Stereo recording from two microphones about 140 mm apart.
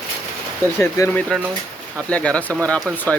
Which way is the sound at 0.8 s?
20° left (ahead or behind).